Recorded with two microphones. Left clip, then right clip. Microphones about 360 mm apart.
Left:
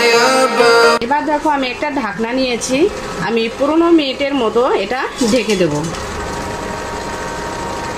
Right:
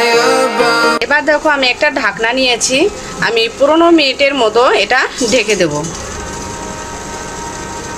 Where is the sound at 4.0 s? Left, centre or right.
Right.